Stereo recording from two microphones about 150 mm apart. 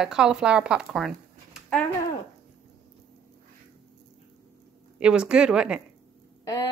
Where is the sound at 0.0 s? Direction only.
5° right (ahead or behind).